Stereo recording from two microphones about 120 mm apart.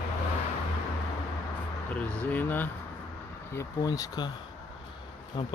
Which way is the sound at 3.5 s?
25° left (ahead or behind).